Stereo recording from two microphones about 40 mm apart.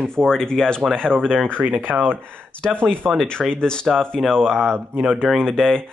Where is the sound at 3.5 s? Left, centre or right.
Left.